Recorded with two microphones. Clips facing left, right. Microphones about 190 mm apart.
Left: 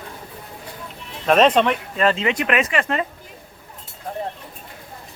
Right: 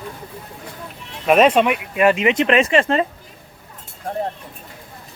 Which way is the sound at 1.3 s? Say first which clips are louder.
Right 2 dB; 10° right (ahead or behind).